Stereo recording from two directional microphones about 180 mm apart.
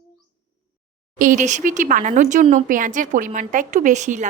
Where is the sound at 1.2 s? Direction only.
45° right (ahead or behind).